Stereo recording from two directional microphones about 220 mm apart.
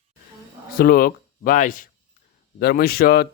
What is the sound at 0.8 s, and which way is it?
Speech, 40° left (ahead or behind).